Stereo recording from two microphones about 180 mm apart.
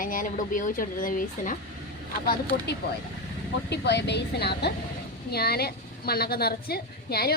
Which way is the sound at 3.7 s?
70° left (ahead or behind).